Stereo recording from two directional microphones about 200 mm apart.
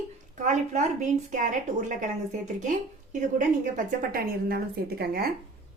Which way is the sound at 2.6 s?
40° right (ahead or behind).